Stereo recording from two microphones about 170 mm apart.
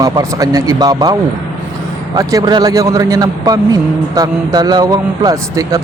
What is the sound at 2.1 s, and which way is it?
A man's voice, 25° right (ahead or behind).